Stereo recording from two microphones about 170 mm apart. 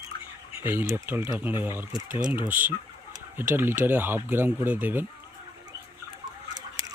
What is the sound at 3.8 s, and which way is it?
Speech, 10° right (ahead or behind).